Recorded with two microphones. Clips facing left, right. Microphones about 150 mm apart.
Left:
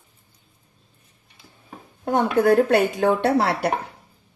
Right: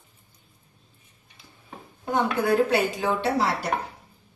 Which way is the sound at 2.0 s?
50° left (ahead or behind).